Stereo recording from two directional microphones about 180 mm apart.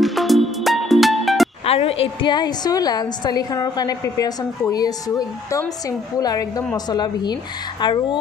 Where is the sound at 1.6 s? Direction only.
35° left (ahead or behind).